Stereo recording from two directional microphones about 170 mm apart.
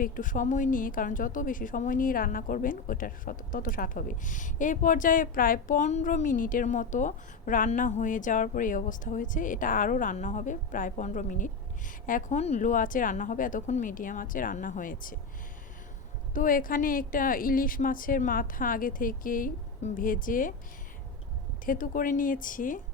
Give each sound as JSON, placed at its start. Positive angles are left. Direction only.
{"t": 0.0, "sound": "a woman's voice", "side_deg": 50}
{"t": 16.3, "sound": "a woman's voice", "side_deg": 55}
{"t": 21.7, "sound": "a woman's voice", "side_deg": 55}